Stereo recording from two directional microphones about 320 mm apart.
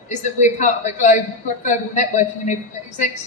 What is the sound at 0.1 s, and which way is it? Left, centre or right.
A woman's voice, left.